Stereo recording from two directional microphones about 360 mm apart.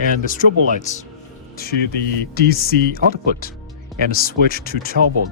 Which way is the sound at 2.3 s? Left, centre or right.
Left.